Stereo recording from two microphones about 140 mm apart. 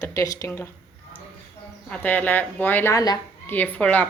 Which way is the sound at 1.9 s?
10° left (ahead or behind).